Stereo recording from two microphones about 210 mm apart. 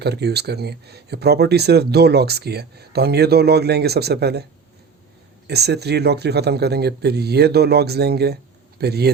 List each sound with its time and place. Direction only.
0.0 s speech: 50° right (ahead or behind)
5.5 s speech: 50° right (ahead or behind)